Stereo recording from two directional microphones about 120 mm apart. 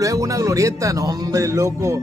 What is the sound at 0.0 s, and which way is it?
Speech, 30° right (ahead or behind).